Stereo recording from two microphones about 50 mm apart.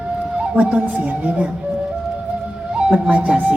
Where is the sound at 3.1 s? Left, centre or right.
Right.